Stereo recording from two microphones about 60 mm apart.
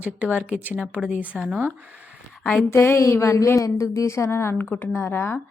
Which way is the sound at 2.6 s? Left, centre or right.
Left.